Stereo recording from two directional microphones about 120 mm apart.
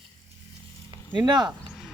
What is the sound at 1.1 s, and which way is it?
Speech, 35° right (ahead or behind).